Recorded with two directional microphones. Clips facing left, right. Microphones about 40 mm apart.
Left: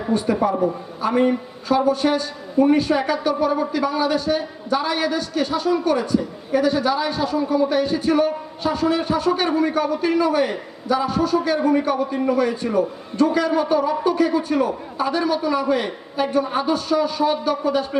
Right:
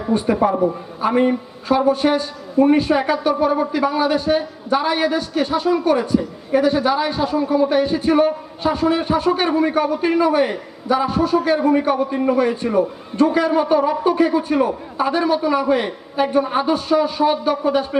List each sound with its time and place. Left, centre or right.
0.4 s a man's voice: right